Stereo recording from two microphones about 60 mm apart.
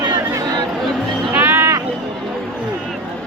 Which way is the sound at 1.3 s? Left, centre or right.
Right.